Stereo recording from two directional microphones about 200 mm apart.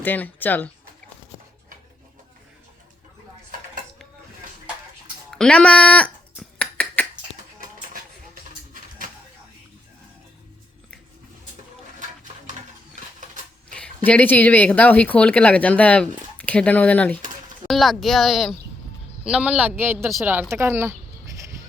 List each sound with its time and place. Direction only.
0.0 s speech: 10° left (ahead or behind)
5.3 s a sound: 5° left (ahead or behind)
13.1 s cash register: 40° right (ahead or behind)
13.7 s a woman's voice: 5° left (ahead or behind); by 20.9 s 10° right (ahead or behind)